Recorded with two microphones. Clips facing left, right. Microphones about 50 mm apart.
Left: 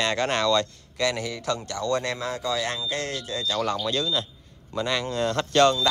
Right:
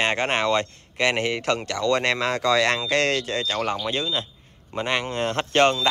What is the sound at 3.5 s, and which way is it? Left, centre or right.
Speech, right.